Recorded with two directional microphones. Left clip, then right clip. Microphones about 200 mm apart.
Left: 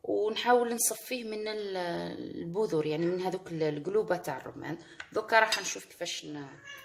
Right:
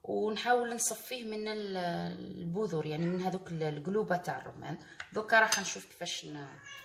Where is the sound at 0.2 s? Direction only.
40° left (ahead or behind).